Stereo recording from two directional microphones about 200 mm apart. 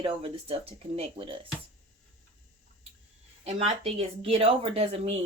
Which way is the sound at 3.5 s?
30° right (ahead or behind).